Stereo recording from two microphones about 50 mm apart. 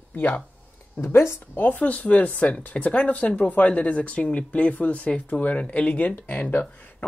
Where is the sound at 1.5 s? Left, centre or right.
Left.